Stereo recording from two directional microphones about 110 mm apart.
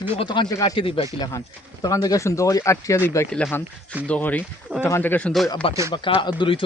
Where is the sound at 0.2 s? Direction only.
45° left (ahead or behind); by 3.2 s 25° left (ahead or behind).